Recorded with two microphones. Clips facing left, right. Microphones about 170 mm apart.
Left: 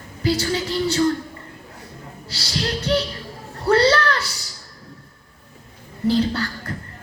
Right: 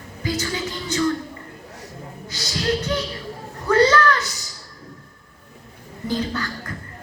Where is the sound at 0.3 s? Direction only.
30° left (ahead or behind).